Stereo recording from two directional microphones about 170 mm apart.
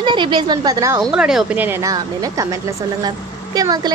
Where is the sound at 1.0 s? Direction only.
5° right (ahead or behind).